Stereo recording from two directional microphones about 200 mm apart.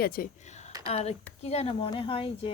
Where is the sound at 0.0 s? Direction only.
45° left (ahead or behind).